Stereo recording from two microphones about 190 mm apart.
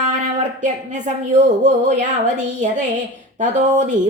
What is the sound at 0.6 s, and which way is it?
A woman's voice, 40° right (ahead or behind).